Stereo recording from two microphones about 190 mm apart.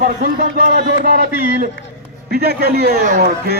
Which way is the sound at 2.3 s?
55° right (ahead or behind).